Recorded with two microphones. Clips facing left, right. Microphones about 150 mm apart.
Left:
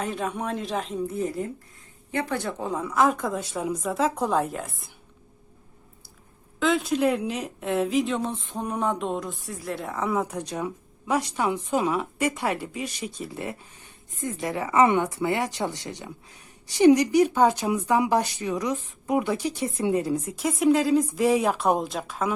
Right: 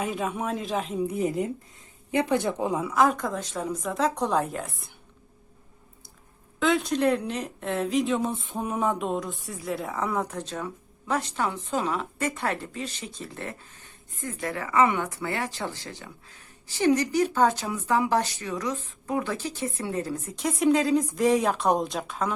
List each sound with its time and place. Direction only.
0.0 s speech: 5° right (ahead or behind)
1.0 s speech: 15° right (ahead or behind); by 4.9 s centre (ahead or behind)
6.6 s speech: centre (ahead or behind)